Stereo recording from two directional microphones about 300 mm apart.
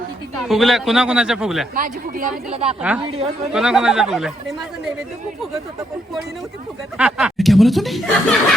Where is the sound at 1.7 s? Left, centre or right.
Right.